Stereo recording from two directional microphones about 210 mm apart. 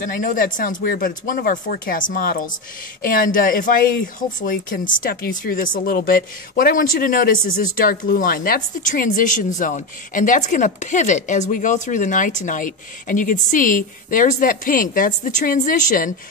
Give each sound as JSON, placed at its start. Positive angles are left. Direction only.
{"t": 0.0, "sound": "a woman's voice", "side_deg": 40}